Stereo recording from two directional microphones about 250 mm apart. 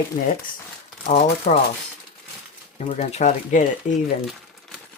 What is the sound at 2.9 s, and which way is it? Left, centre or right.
Speech, left.